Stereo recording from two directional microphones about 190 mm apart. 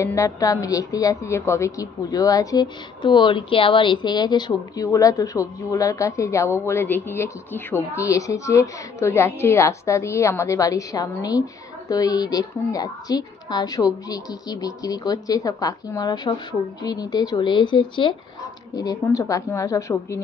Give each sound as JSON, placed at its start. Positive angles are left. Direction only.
{"t": 0.0, "sound": "a woman's voice", "side_deg": 15}